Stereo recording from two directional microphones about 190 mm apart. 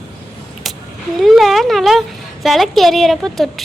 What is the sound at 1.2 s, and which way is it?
A woman's voice, centre (ahead or behind).